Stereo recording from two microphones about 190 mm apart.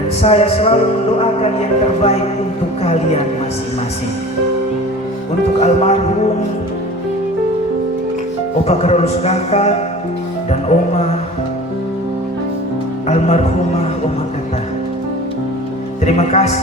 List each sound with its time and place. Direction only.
0.2 s speech: 30° left (ahead or behind)
5.5 s speech: 35° left (ahead or behind)
8.6 s speech: 35° left (ahead or behind)
13.1 s music: 35° left (ahead or behind)
16.0 s speech: 35° left (ahead or behind)